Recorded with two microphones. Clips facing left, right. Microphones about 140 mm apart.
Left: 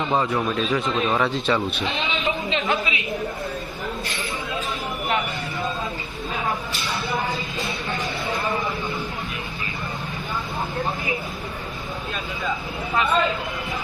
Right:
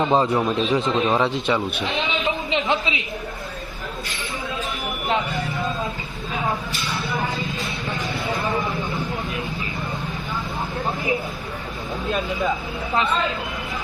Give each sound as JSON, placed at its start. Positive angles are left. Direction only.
{"t": 0.0, "sound": "a man's voice", "side_deg": -25}